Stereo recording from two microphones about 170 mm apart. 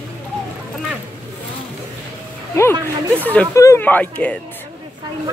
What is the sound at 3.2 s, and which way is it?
Speech, 15° left (ahead or behind).